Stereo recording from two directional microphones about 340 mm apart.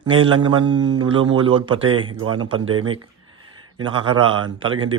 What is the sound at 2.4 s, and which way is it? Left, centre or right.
Speech, centre.